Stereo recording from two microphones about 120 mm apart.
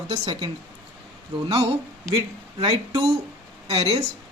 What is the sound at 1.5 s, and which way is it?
Speech, 55° right (ahead or behind).